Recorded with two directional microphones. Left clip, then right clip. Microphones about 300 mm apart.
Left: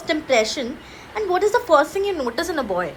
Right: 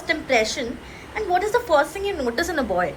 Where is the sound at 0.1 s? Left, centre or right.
Centre.